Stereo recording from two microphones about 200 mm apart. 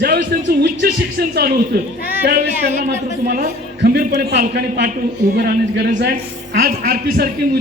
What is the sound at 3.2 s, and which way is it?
A man's voice, 50° right (ahead or behind).